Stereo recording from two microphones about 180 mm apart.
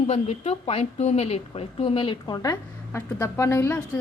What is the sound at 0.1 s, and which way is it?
A woman's voice, 35° left (ahead or behind).